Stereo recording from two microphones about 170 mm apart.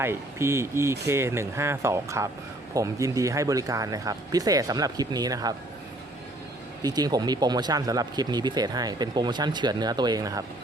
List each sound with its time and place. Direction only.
0.0 s speech: 15° right (ahead or behind)
6.8 s speech: 25° right (ahead or behind)